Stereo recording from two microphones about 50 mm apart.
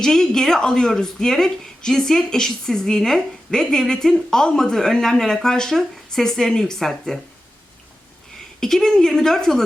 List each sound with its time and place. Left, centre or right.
0.0 s speech: centre
8.6 s speech: centre